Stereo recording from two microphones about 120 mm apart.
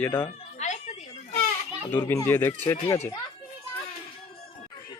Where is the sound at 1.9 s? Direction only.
15° left (ahead or behind).